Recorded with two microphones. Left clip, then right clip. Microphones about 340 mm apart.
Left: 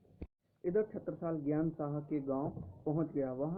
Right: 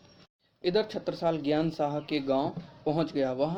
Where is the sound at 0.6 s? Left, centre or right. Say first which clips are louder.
Right 7 dB; right.